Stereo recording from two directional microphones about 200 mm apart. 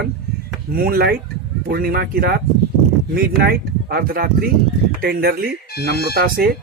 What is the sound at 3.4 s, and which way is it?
Speech, 50° right (ahead or behind).